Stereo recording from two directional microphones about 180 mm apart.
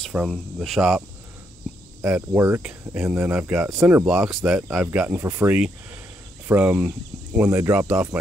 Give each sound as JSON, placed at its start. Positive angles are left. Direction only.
{"t": 0.0, "sound": "speech", "side_deg": 0}
{"t": 2.0, "sound": "speech", "side_deg": -10}